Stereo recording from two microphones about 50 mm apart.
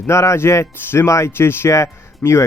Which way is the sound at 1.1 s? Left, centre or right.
Left.